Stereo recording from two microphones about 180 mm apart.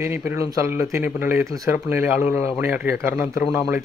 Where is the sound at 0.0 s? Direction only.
15° right (ahead or behind).